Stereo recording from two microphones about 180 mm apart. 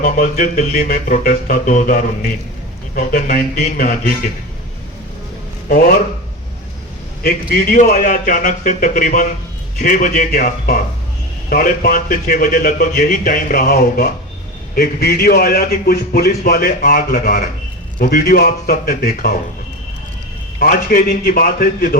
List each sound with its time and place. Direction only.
0.0 s a man's voice: 50° left (ahead or behind)
7.2 s a man's voice: 55° left (ahead or behind)
20.6 s a man's voice: 55° left (ahead or behind)